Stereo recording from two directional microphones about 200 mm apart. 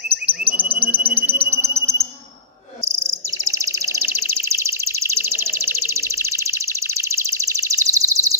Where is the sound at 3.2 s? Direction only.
15° right (ahead or behind).